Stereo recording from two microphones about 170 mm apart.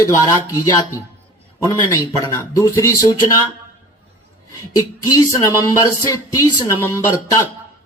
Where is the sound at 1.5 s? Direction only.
15° left (ahead or behind).